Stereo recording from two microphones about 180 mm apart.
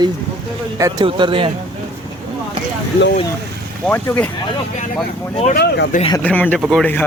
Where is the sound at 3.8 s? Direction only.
5° left (ahead or behind).